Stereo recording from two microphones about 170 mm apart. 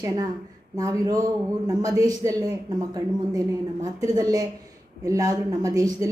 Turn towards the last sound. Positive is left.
turn(degrees=-20)  # may be behind; listen again after turning